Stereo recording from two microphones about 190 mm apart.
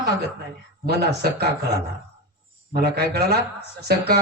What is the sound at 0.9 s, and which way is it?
Speech, 55° right (ahead or behind).